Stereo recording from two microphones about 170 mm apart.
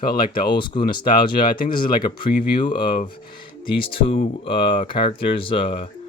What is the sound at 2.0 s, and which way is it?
Speech, 25° left (ahead or behind).